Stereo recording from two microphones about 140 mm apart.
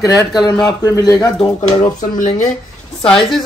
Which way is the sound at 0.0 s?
25° left (ahead or behind).